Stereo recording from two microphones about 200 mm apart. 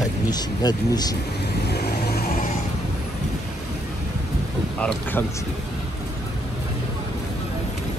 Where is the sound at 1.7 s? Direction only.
50° left (ahead or behind).